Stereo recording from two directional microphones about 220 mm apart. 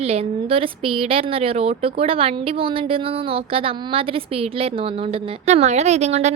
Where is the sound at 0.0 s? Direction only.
30° right (ahead or behind).